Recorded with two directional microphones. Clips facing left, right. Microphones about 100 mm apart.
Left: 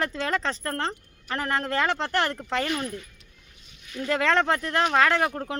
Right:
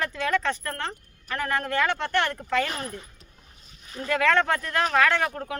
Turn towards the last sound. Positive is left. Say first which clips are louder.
# left 1 dB
turn(degrees=30)  # may be behind; listen again after turning